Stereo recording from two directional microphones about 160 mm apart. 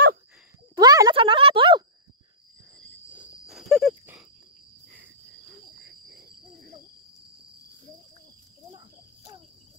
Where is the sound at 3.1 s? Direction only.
5° right (ahead or behind).